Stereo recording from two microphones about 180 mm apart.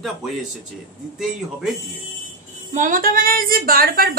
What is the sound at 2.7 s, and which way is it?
A woman's voice, 45° right (ahead or behind).